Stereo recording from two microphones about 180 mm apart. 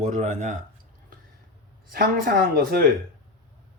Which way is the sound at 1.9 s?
55° right (ahead or behind).